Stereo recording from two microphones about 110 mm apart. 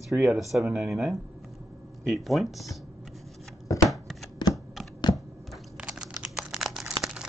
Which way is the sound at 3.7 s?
30° left (ahead or behind).